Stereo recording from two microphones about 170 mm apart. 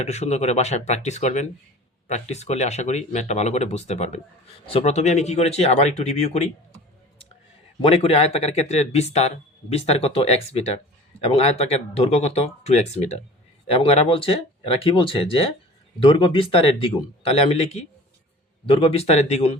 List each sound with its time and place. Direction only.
0.0 s speech: 40° left (ahead or behind)
7.8 s speech: 35° left (ahead or behind)